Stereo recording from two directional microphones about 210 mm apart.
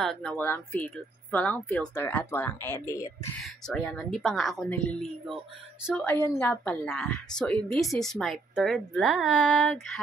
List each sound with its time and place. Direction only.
0.0 s speech: 5° left (ahead or behind)
3.3 s a woman's voice: centre (ahead or behind)